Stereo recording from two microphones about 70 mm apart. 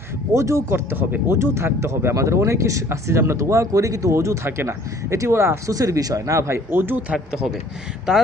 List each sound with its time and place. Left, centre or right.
0.3 s speech: right
5.7 s speech: right
6.7 s speech: right
7.1 s speech: centre